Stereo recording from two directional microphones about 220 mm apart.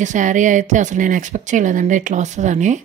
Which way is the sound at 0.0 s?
35° right (ahead or behind).